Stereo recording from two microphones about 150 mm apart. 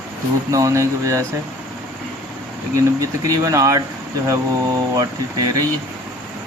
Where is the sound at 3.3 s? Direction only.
25° right (ahead or behind).